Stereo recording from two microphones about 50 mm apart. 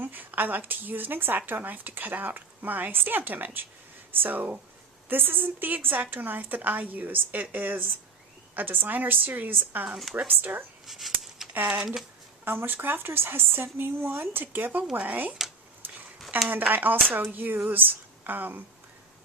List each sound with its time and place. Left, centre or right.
0.0 s a woman's voice: right
10.8 s a sound: centre
11.7 s speech: centre
12.5 s a woman's voice: right
16.5 s speech: right